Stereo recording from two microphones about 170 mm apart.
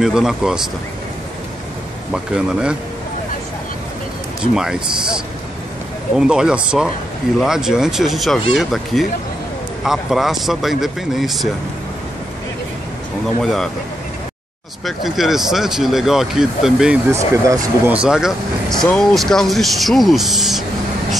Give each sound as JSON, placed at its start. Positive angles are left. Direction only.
{"t": 0.0, "sound": "speech", "side_deg": -5}
{"t": 2.1, "sound": "speech", "side_deg": -5}
{"t": 4.6, "sound": "speech", "side_deg": -5}
{"t": 13.4, "sound": "speech", "side_deg": 0}
{"t": 14.9, "sound": "speech", "side_deg": 0}
{"t": 17.1, "sound": "speech", "side_deg": -15}